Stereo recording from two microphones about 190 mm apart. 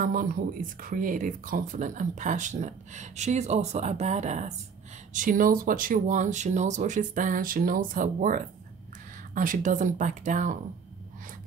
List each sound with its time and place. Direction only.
0.0 s speech: 45° right (ahead or behind)